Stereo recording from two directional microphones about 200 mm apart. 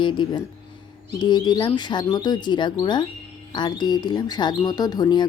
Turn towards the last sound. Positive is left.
turn(degrees=20)  # may be behind; listen again after turning